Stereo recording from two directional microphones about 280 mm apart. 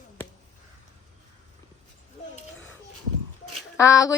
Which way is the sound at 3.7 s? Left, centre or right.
Centre.